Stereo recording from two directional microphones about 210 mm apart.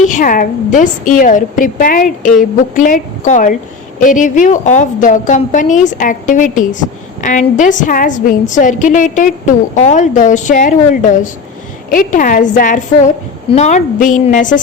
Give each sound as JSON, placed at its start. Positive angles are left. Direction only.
{"t": 0.0, "sound": "a woman's voice", "side_deg": 40}